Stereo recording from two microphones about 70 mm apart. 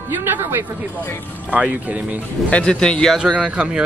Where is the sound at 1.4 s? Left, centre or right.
Centre.